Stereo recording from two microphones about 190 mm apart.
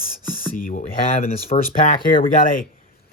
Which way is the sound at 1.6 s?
45° left (ahead or behind).